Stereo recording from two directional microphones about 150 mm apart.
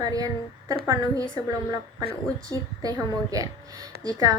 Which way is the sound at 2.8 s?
25° right (ahead or behind).